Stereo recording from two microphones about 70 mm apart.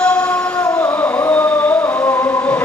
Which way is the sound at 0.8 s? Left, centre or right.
Left.